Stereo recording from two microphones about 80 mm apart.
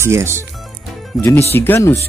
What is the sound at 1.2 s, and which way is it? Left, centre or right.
Speech, left.